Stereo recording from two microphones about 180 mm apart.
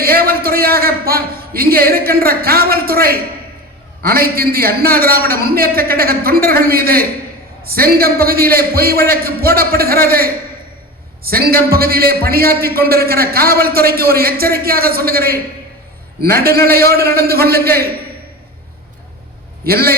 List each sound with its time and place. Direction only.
0.0 s a man's voice: 55° right (ahead or behind)
19.6 s a man's voice: 60° right (ahead or behind)